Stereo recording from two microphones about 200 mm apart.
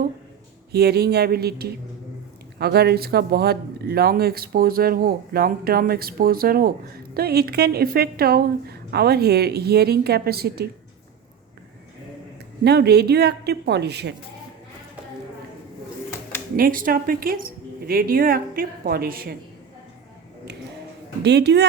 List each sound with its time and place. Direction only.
0.7 s speech: 50° right (ahead or behind)
12.6 s a woman's voice: 55° right (ahead or behind)
16.6 s speech: 45° right (ahead or behind)
21.2 s a woman's voice: 60° right (ahead or behind)